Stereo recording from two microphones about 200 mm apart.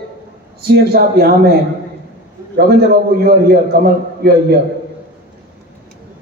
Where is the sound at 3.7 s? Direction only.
55° right (ahead or behind).